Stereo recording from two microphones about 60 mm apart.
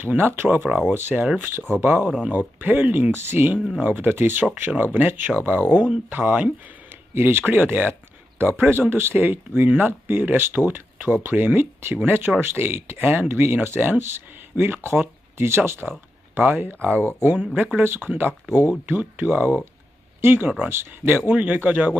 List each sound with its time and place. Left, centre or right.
0.0 s speech: right
0.4 s speech: right
17.3 s speech: right